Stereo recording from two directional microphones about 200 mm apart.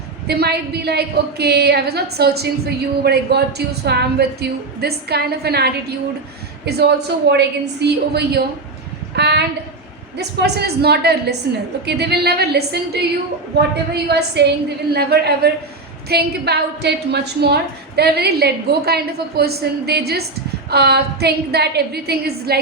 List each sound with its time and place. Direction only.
0.3 s a woman's voice: 55° right (ahead or behind)
6.7 s a woman's voice: 55° right (ahead or behind)